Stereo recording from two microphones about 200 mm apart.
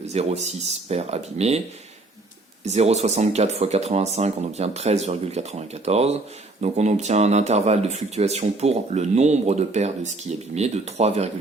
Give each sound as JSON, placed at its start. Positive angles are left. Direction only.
{"t": 0.0, "sound": "speech", "side_deg": -35}
{"t": 2.6, "sound": "speech", "side_deg": -35}